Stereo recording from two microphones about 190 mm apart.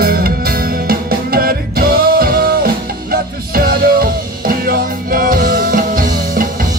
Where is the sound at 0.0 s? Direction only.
50° right (ahead or behind).